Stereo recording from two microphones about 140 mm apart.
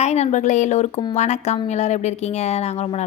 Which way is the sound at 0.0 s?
55° left (ahead or behind).